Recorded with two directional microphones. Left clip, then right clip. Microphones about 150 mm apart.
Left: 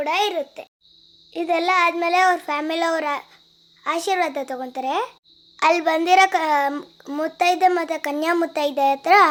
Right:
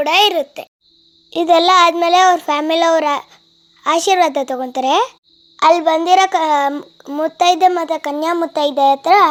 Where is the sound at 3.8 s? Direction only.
45° right (ahead or behind).